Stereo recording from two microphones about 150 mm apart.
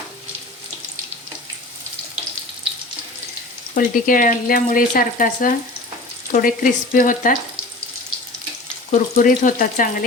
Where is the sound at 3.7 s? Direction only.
65° left (ahead or behind).